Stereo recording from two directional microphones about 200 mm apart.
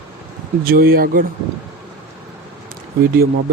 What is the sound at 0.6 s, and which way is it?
Speech, 45° right (ahead or behind).